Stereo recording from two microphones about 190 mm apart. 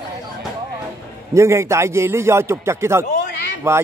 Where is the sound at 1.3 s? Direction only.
15° right (ahead or behind).